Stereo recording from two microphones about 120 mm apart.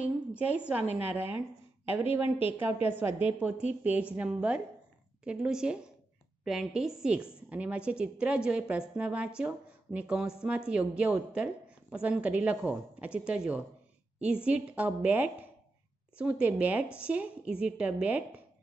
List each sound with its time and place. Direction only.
0.0 s a woman's voice: 10° right (ahead or behind)
2.6 s a woman's voice: 15° right (ahead or behind)